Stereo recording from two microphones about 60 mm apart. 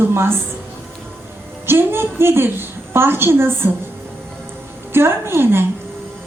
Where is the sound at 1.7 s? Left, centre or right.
Right.